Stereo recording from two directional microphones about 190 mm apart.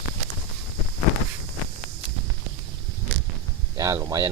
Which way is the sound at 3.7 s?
15° right (ahead or behind).